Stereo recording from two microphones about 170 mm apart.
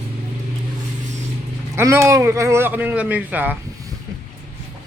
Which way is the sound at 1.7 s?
15° right (ahead or behind).